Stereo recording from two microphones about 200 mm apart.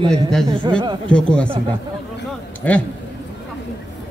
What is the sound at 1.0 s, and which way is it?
Speech, 5° left (ahead or behind).